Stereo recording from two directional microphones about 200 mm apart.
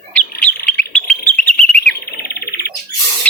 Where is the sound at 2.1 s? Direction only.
50° left (ahead or behind).